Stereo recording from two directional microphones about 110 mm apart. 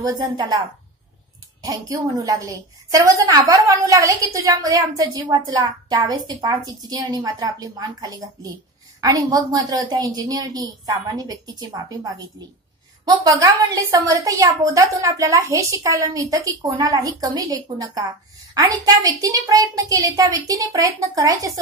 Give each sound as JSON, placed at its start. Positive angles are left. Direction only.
{"t": 0.0, "sound": "a woman's voice", "side_deg": -40}
{"t": 1.6, "sound": "a woman's voice", "side_deg": -30}